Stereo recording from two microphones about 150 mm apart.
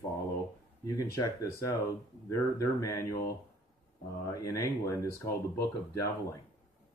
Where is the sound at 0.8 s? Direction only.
25° left (ahead or behind).